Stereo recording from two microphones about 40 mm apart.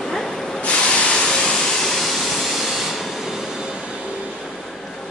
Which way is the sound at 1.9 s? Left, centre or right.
Centre.